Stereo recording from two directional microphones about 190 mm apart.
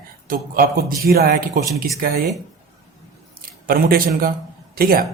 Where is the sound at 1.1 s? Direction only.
50° right (ahead or behind).